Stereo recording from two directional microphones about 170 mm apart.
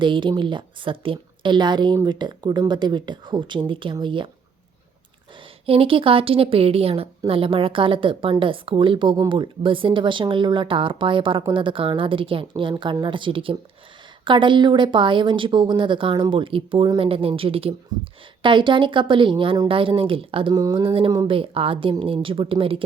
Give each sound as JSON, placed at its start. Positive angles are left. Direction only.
{"t": 0.0, "sound": "speech", "side_deg": -30}
{"t": 5.6, "sound": "a woman's voice", "side_deg": -35}
{"t": 20.6, "sound": "speech", "side_deg": -20}
{"t": 20.8, "sound": "a woman's voice", "side_deg": -30}
{"t": 21.1, "sound": "speech", "side_deg": -20}
{"t": 21.3, "sound": "a woman's voice", "side_deg": -30}